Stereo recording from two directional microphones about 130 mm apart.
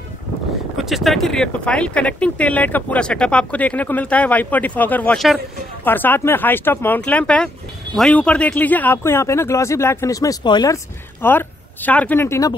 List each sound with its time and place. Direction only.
0.7 s speech: centre (ahead or behind); by 10.8 s 35° left (ahead or behind)
11.1 s speech: 15° left (ahead or behind)